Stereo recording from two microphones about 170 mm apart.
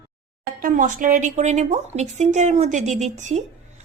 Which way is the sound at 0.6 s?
50° right (ahead or behind).